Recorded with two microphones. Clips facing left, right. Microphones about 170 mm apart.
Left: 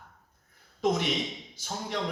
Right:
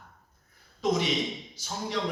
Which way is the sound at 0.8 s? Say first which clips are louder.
Even; 55° left (ahead or behind).